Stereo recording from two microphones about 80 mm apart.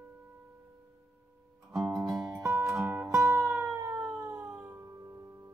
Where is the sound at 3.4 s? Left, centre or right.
Centre.